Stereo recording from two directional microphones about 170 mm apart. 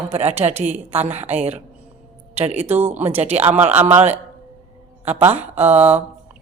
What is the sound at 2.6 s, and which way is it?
Speech, 10° right (ahead or behind).